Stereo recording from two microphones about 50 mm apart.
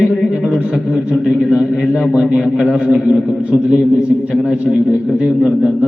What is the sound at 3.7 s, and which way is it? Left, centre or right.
Speech, centre.